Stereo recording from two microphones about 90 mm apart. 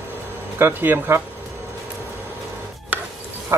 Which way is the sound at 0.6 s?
25° right (ahead or behind).